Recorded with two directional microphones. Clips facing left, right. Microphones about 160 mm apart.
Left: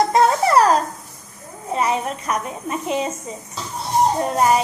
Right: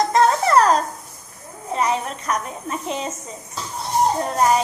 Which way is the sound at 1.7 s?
5° left (ahead or behind).